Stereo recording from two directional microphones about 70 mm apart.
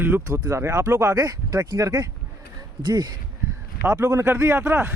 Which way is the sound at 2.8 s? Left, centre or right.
Right.